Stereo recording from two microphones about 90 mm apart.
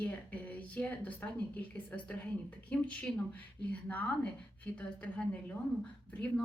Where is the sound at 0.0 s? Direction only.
15° left (ahead or behind).